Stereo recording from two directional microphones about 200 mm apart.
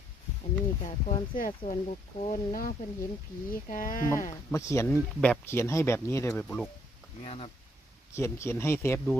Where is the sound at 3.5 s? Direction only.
40° left (ahead or behind).